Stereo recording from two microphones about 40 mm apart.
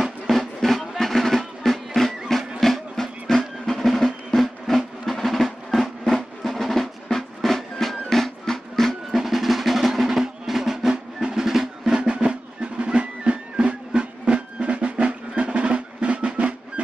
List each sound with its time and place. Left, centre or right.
0.3 s music: centre
9.1 s music: centre; by 16.8 s right